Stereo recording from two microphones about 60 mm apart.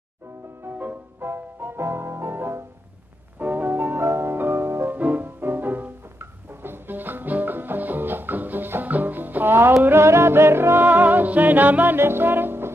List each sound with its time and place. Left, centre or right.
0.7 s music: right
1.2 s music: right
3.3 s music: right
4.9 s music: right
9.8 s music: right